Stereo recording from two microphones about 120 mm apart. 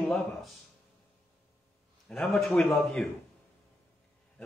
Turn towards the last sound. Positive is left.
turn(degrees=0)  # may be behind; listen again after turning